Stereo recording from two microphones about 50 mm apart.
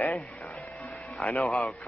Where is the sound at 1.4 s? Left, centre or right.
Centre.